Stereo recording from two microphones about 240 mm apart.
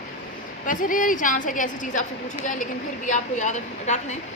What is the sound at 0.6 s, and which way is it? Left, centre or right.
A woman's voice, left.